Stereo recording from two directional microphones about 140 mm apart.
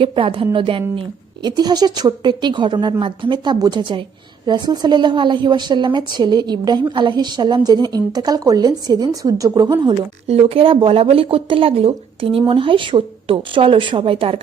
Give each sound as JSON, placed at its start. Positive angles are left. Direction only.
{"t": 0.0, "sound": "a woman's voice", "side_deg": -40}
{"t": 10.2, "sound": "a woman's voice", "side_deg": -45}